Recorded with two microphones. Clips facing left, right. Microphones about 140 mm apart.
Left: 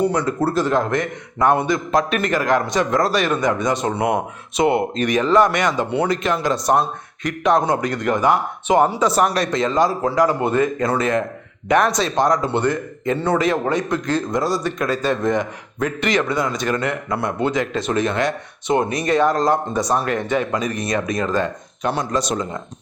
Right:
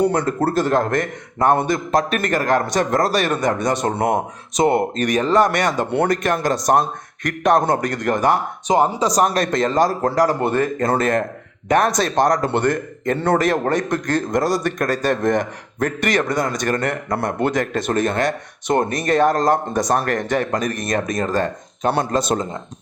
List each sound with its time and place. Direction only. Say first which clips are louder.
0.0 s a man's voice: right 1 dB; 50° right (ahead or behind)
17.4 s a man's voice: even; 55° right (ahead or behind)
21.9 s a man's voice: right 2 dB; 50° right (ahead or behind)